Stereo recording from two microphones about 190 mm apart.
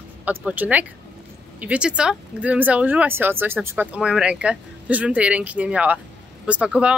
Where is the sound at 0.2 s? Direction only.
10° right (ahead or behind).